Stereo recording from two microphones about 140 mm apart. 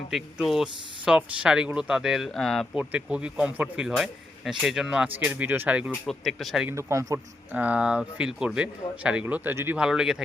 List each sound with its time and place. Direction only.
0.1 s speech: centre (ahead or behind)
2.7 s speech: 10° right (ahead or behind)
6.7 s speech: 20° right (ahead or behind)
7.5 s speech: 10° right (ahead or behind)